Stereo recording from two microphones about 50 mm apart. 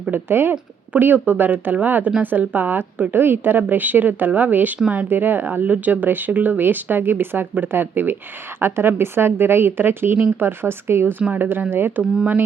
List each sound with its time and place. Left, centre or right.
0.1 s speech: right
11.3 s speech: right